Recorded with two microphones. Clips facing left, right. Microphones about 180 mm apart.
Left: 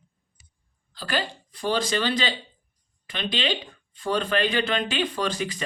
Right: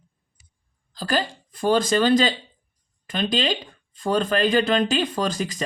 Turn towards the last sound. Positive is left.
turn(degrees=-40)  # may be behind; listen again after turning